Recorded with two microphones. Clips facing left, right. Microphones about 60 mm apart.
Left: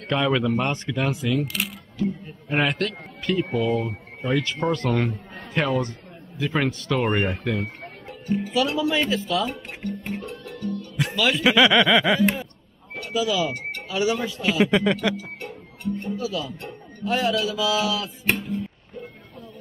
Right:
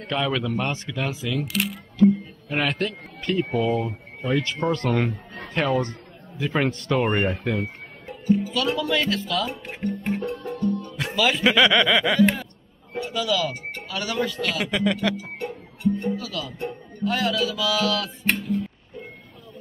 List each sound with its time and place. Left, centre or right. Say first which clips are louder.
0.1 s speech: left 3 dB; centre
2.5 s speech: left 2 dB; centre
3.3 s a man's voice: right 1 dB; centre
8.5 s speech: left 1 dB; centre
9.5 s music: right 2 dB; centre
10.2 s music: right 6 dB; right
11.0 s speech: left 1 dB; centre
13.8 s a man's voice: left 3 dB; centre
15.1 s music: right 3 dB; centre
16.2 s speech: left 2 dB; left